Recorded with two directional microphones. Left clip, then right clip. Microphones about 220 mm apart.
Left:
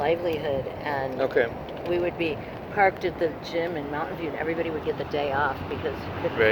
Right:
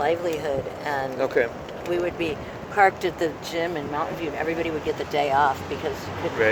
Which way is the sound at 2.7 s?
30° right (ahead or behind).